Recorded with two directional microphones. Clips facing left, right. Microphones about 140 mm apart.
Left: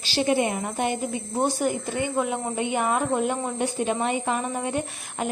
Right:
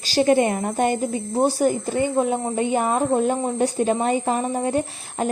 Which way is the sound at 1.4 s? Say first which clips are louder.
Right 5 dB; 35° right (ahead or behind).